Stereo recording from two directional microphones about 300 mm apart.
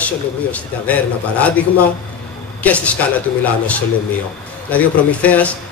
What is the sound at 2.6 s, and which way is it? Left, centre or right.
Speech, centre.